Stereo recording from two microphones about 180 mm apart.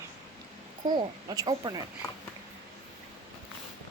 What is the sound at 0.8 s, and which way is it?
Speech, 25° right (ahead or behind).